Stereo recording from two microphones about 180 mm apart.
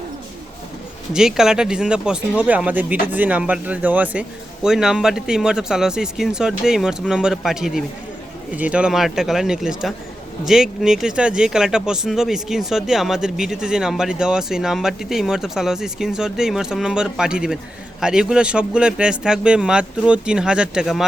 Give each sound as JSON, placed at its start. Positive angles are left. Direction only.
{"t": 1.1, "sound": "speech", "side_deg": -5}